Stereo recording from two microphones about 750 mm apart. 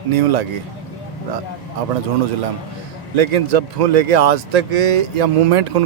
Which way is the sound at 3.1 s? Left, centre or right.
Right.